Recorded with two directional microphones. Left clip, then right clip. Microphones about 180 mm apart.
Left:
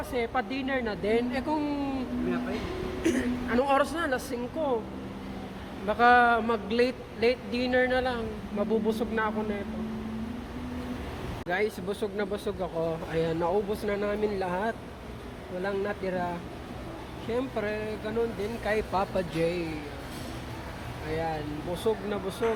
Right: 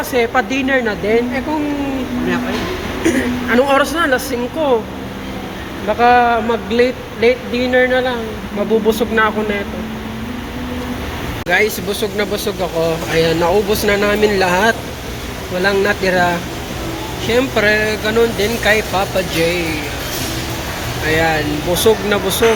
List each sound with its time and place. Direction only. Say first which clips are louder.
0.1 s speech: right 15 dB; 5° right (ahead or behind)
3.0 s speech: right 12 dB; 5° left (ahead or behind)
5.9 s speech: right 10 dB; 15° left (ahead or behind)
8.9 s speech: right 15 dB; centre (ahead or behind)
11.4 s speech: right 14 dB; 15° left (ahead or behind)
18.9 s speech: right 12 dB; 20° left (ahead or behind)
21.1 s speech: right 17 dB; 5° left (ahead or behind)